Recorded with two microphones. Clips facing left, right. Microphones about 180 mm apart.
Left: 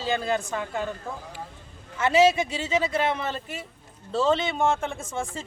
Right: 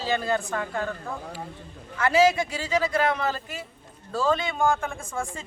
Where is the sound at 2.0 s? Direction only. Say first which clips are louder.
Left 1 dB; 25° left (ahead or behind).